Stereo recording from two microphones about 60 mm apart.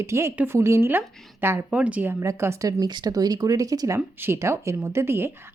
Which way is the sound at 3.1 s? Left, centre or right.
Right.